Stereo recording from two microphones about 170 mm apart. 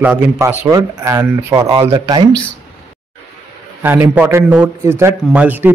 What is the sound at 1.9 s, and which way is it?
Speech, 25° right (ahead or behind).